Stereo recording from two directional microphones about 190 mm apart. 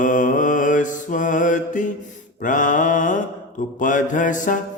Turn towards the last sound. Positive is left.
turn(degrees=45)  # may be behind; listen again after turning